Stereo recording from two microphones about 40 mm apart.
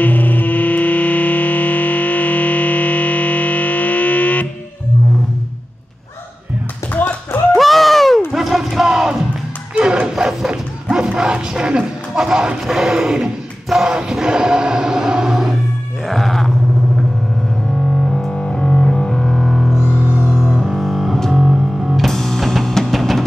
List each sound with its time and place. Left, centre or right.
0.0 s music: left
6.9 s tap: left
7.5 s a sound: centre
8.3 s a sound: centre
9.8 s bow-wow: right
12.6 s a sound: centre
14.2 s music: centre
16.1 s groan: centre
18.3 s music: left
19.4 s music: centre
19.7 s music: centre
22.0 s music: centre